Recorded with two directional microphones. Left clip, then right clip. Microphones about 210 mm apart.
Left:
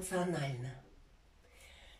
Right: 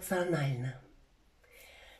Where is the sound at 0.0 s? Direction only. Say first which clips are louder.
Right 4 dB; 45° right (ahead or behind).